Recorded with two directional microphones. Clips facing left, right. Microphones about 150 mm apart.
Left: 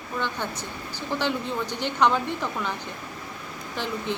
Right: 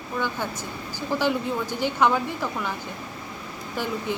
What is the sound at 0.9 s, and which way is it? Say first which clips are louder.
Speech: right 3 dB; 10° right (ahead or behind).